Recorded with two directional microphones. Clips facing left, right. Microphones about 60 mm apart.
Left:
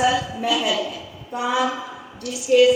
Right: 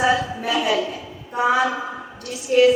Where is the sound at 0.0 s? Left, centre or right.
Right.